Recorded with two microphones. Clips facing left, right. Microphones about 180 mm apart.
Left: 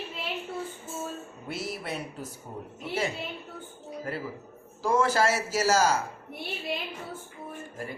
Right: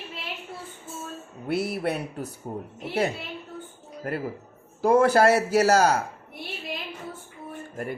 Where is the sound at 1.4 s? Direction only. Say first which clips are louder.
Right 9 dB; 60° right (ahead or behind).